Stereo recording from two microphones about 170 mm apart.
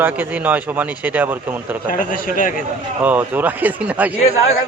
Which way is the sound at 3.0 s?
10° right (ahead or behind).